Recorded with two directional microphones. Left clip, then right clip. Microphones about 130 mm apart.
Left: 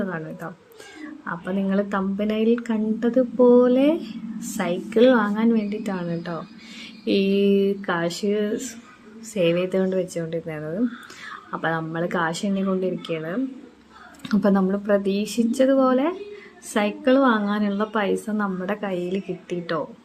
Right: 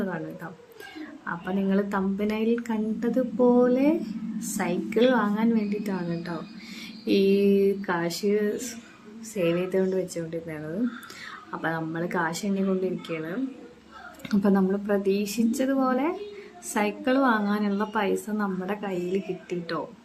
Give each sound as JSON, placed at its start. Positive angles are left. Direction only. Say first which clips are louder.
{"t": 1.3, "sound": "a woman's voice", "louder": "left 2 dB", "side_deg": 20}